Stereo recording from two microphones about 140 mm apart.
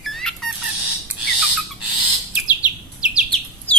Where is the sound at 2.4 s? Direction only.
10° right (ahead or behind).